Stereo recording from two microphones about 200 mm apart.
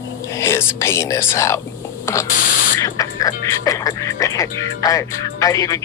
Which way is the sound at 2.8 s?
15° left (ahead or behind).